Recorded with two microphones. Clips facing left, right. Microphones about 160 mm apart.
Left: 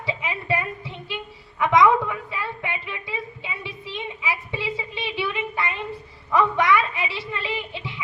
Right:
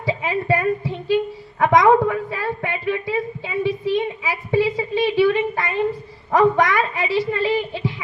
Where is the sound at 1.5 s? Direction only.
50° right (ahead or behind).